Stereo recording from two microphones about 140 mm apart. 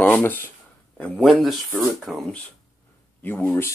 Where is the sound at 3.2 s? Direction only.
10° left (ahead or behind).